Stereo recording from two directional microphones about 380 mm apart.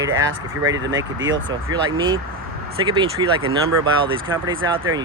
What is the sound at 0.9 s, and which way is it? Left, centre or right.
Speech, right.